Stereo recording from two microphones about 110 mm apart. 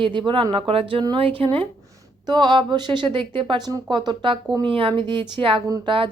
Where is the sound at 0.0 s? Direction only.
45° right (ahead or behind).